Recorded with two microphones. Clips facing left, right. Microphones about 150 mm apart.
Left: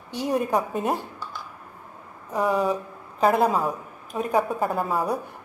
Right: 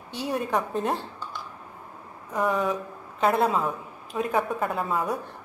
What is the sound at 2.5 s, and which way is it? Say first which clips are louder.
Speech: left 5 dB; 35° left (ahead or behind).